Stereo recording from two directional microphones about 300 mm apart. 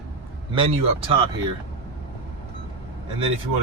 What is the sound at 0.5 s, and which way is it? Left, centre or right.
Speech, centre.